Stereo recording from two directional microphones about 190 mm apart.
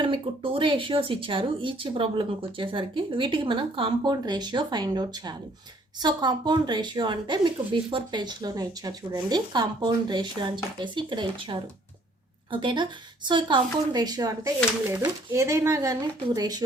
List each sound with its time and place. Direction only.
0.0 s speech: 30° right (ahead or behind)